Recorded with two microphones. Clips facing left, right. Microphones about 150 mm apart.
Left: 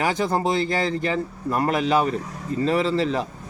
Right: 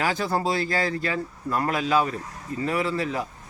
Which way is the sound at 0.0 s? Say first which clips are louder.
Left 3 dB; 20° left (ahead or behind).